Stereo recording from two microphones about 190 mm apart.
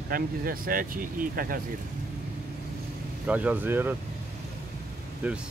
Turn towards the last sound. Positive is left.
turn(degrees=-5)  # may be behind; listen again after turning